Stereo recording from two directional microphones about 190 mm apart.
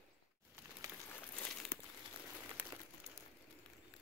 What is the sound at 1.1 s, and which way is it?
Crumpling, 10° left (ahead or behind).